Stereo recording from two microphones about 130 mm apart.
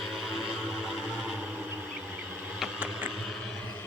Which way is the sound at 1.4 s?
10° right (ahead or behind).